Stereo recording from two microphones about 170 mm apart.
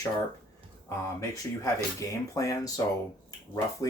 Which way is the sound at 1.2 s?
20° left (ahead or behind).